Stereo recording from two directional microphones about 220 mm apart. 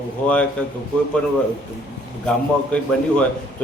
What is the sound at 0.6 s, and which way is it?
Speech, 5° left (ahead or behind).